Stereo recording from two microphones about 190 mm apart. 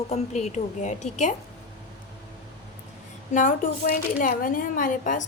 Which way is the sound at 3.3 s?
45° left (ahead or behind).